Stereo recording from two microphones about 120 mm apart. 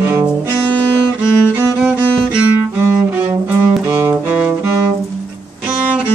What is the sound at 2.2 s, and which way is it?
Cello, 15° right (ahead or behind).